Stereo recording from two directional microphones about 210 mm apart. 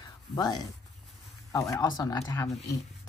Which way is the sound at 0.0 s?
20° left (ahead or behind).